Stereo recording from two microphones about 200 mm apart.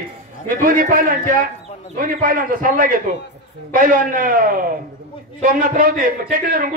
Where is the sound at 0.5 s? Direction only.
45° right (ahead or behind).